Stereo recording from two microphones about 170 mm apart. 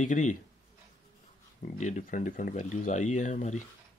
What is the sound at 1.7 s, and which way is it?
Speech, 45° left (ahead or behind).